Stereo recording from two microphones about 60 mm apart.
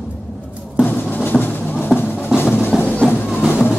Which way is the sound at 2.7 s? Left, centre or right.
Centre.